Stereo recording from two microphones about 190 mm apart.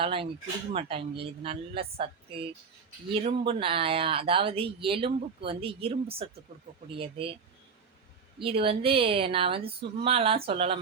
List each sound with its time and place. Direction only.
0.0 s speech: 30° right (ahead or behind)
8.4 s speech: 30° right (ahead or behind)